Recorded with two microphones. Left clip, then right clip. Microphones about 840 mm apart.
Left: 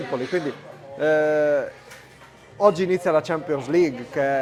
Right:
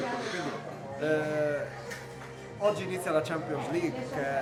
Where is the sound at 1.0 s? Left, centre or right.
Left.